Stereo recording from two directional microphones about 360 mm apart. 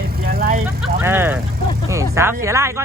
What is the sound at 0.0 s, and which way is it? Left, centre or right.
Vehicle, right.